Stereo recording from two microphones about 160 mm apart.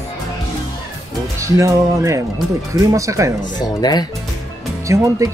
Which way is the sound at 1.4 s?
20° right (ahead or behind).